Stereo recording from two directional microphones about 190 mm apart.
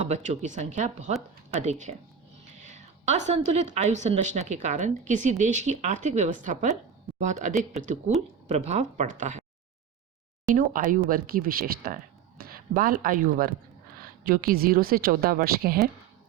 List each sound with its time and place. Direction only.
0.1 s a woman's voice: 40° right (ahead or behind)
2.6 s a sound: 40° right (ahead or behind)
3.8 s a woman's voice: 35° right (ahead or behind)
10.5 s a woman's voice: 45° right (ahead or behind)